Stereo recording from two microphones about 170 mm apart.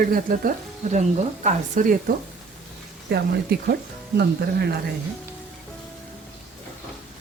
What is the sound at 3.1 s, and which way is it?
Speech, 70° right (ahead or behind).